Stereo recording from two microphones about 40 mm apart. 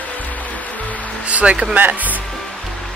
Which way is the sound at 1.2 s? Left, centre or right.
Right.